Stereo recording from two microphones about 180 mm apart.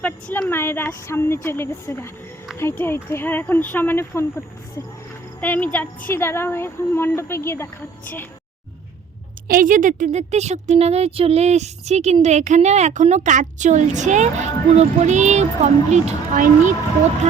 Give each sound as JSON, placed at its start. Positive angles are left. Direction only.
{"t": 0.0, "sound": "speech", "side_deg": 10}
{"t": 9.5, "sound": "a woman's voice", "side_deg": -50}
{"t": 16.3, "sound": "speech", "side_deg": -50}